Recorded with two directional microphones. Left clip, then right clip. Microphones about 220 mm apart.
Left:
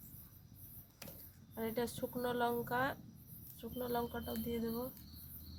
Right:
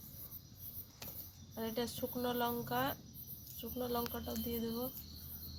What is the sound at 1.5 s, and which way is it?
Speech, 20° left (ahead or behind).